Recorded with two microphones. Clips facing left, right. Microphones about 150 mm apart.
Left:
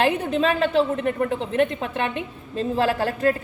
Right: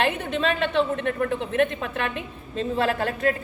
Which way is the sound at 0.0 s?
35° left (ahead or behind).